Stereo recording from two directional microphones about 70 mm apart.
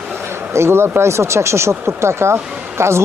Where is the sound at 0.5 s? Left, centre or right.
Right.